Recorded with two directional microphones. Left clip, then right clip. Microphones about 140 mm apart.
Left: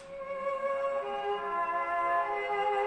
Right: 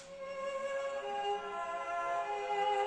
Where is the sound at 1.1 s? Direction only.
25° right (ahead or behind).